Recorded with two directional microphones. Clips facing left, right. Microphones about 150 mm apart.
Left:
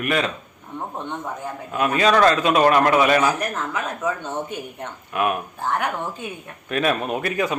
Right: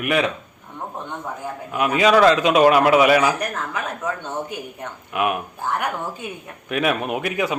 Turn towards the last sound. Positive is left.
turn(degrees=-10)  # may be behind; listen again after turning